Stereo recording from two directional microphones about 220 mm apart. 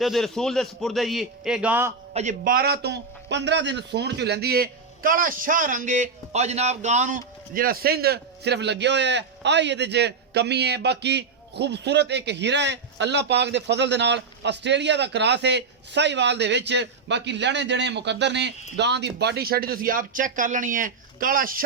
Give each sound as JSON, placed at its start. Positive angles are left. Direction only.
{"t": 0.0, "sound": "a man's voice", "side_deg": 0}
{"t": 2.1, "sound": "a man's voice", "side_deg": -35}